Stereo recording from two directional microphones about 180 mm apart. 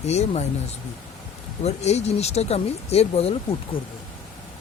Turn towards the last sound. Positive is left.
turn(degrees=35)  # may be behind; listen again after turning